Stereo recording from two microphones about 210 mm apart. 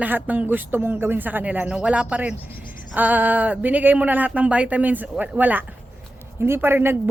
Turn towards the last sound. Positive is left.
turn(degrees=-10)  # may be behind; listen again after turning